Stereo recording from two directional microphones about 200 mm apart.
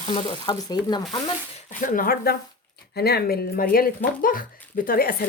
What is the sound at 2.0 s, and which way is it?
Speech, 50° left (ahead or behind).